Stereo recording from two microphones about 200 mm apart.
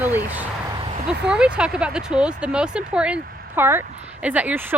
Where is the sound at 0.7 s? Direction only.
25° right (ahead or behind).